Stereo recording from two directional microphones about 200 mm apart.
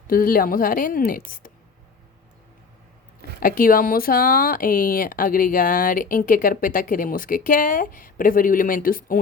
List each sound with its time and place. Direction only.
0.1 s speech: 45° left (ahead or behind)
3.2 s speech: 45° left (ahead or behind)